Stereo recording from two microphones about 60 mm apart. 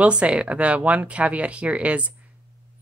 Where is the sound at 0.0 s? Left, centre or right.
Centre.